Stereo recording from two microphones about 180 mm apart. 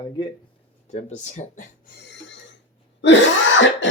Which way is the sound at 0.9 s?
40° left (ahead or behind).